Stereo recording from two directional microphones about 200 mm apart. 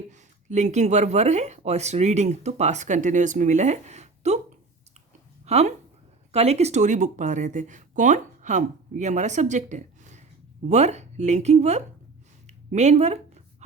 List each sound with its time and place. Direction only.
0.1 s speech: 35° right (ahead or behind)
5.5 s speech: 30° right (ahead or behind)
12.5 s a sound: 35° right (ahead or behind)